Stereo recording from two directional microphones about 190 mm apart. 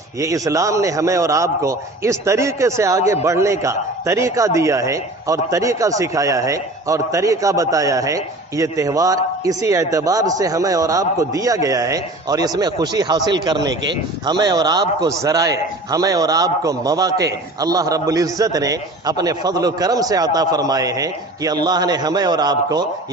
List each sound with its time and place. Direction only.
0.2 s a man's voice: 15° right (ahead or behind)